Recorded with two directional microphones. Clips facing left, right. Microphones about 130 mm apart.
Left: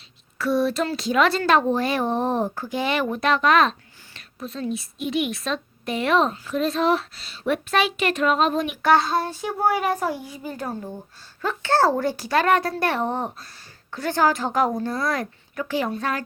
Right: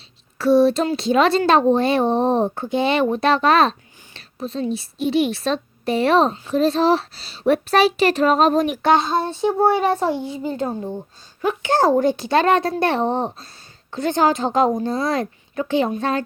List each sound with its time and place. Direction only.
0.3 s speech: 25° right (ahead or behind)
8.8 s speech: 20° right (ahead or behind)